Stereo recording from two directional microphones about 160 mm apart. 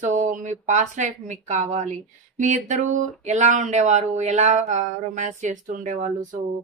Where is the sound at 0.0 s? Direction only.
50° right (ahead or behind).